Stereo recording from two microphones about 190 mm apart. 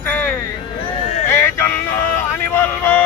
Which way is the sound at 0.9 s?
35° left (ahead or behind).